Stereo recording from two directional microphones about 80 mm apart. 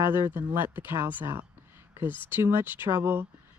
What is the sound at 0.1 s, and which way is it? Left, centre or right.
Speech, right.